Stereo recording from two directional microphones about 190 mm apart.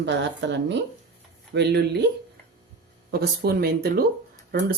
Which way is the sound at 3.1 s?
55° right (ahead or behind).